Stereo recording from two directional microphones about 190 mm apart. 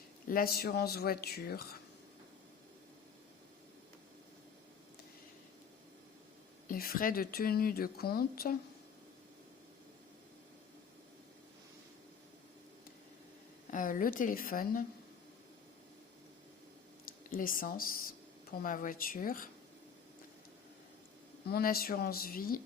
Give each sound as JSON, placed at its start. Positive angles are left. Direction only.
{"t": 0.3, "sound": "a woman's voice", "side_deg": 50}
{"t": 6.7, "sound": "a woman's voice", "side_deg": 50}
{"t": 13.7, "sound": "a woman's voice", "side_deg": 45}
{"t": 17.1, "sound": "a woman's voice", "side_deg": 45}
{"t": 21.5, "sound": "a woman's voice", "side_deg": 50}